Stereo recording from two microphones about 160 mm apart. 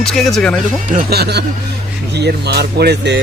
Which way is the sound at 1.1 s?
90° right.